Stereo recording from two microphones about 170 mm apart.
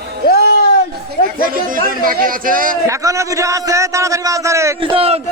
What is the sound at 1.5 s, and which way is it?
A man's voice, 55° right (ahead or behind).